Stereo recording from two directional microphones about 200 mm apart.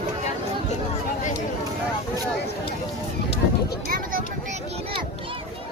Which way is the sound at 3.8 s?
45° right (ahead or behind).